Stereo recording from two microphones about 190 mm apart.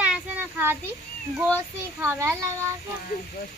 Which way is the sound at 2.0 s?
15° right (ahead or behind).